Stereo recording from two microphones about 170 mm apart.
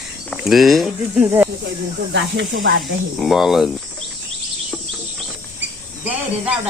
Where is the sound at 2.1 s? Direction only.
90° right.